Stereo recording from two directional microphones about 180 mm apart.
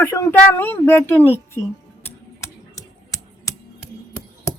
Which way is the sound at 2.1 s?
15° left (ahead or behind).